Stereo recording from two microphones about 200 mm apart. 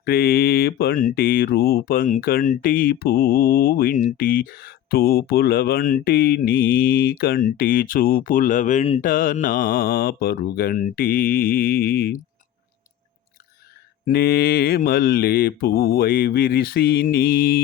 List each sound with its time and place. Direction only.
0.0 s speech: 50° left (ahead or behind)
14.0 s speech: 50° left (ahead or behind)